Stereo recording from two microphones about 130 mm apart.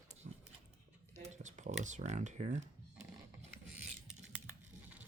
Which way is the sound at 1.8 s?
65° right (ahead or behind).